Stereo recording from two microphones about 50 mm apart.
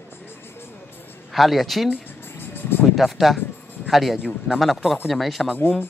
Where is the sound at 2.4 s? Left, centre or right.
Left.